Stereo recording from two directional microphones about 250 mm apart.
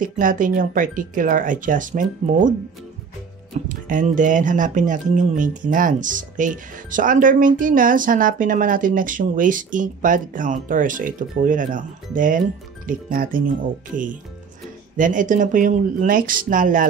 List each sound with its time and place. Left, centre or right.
0.0 s speech: right
3.6 s speech: right